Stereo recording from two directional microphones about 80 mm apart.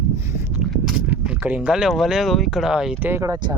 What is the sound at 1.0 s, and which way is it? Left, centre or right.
Speech, centre.